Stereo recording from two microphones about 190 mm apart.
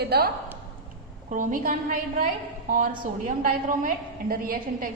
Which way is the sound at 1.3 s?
45° right (ahead or behind).